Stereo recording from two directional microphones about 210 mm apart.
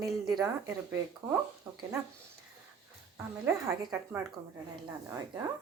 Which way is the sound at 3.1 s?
15° right (ahead or behind).